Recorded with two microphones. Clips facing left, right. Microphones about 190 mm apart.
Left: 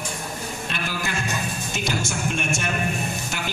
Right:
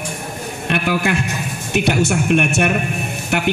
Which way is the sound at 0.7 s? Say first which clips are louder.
Right 13 dB; 65° right (ahead or behind).